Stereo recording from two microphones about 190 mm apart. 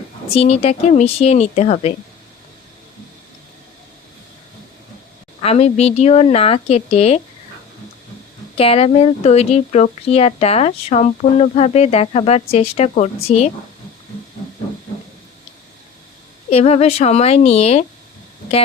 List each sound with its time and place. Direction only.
0.3 s speech: 30° left (ahead or behind)
5.4 s speech: 35° left (ahead or behind)
8.5 s speech: 30° left (ahead or behind)
16.5 s speech: 35° left (ahead or behind)